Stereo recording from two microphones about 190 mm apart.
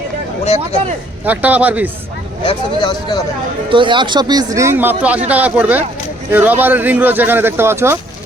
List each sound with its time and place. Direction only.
1.2 s speech: 10° right (ahead or behind)
2.4 s speech: 25° left (ahead or behind)
3.7 s a man's voice: 25° right (ahead or behind)